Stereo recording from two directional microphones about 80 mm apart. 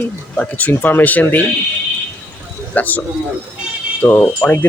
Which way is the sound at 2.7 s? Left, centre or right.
Left.